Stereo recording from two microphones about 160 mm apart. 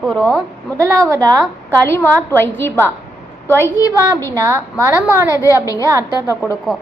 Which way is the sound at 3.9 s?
20° right (ahead or behind).